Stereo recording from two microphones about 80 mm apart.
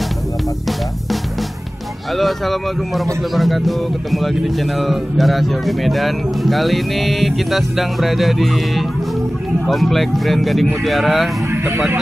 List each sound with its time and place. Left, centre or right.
2.1 s speech: centre
11.5 s speech: right